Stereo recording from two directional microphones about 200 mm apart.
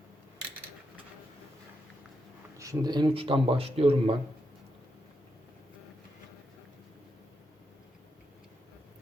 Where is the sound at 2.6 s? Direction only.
20° right (ahead or behind).